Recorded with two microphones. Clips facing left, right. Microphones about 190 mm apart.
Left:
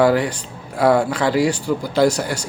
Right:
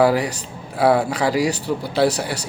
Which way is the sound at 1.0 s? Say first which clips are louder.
Left 2 dB; 10° right (ahead or behind).